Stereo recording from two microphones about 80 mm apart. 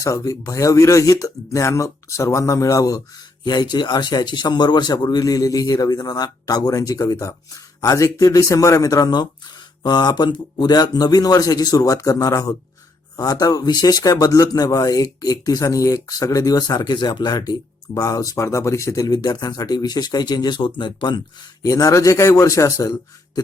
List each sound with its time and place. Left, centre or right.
0.0 s speech: left
3.4 s speech: left
19.1 s speech: left
21.6 s speech: left